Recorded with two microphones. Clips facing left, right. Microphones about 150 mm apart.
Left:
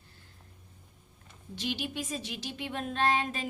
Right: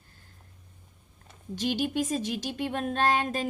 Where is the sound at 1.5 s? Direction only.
45° right (ahead or behind).